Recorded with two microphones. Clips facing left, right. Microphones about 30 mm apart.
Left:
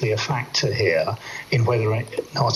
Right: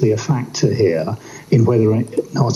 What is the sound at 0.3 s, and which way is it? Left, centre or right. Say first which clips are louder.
Speech: right 5 dB; left.